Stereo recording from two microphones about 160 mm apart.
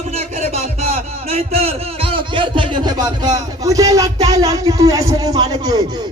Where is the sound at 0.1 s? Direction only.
40° right (ahead or behind); by 3.1 s 25° right (ahead or behind).